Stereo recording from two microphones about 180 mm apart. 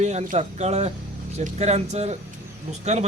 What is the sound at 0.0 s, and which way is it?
Speech, 40° right (ahead or behind).